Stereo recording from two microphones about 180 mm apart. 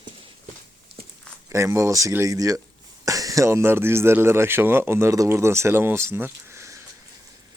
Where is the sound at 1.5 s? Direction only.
15° right (ahead or behind).